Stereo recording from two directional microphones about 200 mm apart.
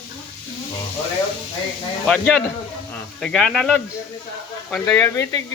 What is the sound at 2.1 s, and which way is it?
Speech, 5° left (ahead or behind).